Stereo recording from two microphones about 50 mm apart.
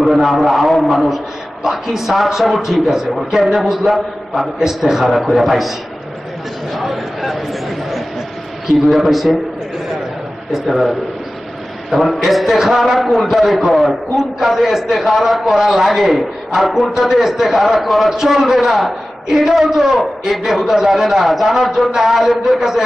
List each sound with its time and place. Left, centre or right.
0.0 s a man's voice: centre
6.7 s a man's voice: centre
10.5 s a man's voice: centre